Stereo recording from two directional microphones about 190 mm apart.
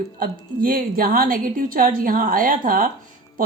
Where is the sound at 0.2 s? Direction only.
50° right (ahead or behind).